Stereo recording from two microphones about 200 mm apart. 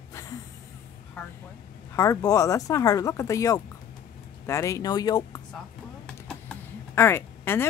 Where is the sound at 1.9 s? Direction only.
15° left (ahead or behind).